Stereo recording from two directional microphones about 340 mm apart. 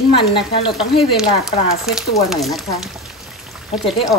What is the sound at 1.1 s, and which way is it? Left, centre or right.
Speech, centre.